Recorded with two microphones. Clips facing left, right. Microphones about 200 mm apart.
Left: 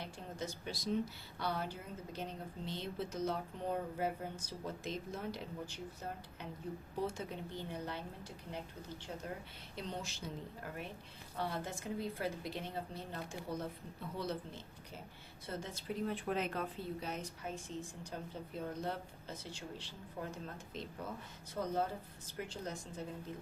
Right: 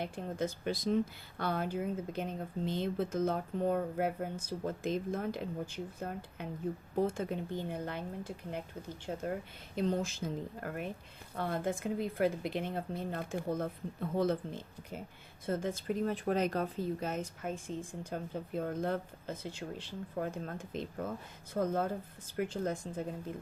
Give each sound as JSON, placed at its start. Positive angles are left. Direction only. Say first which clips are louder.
{"t": 0.0, "sound": "speech", "louder": "right 8 dB", "side_deg": -55}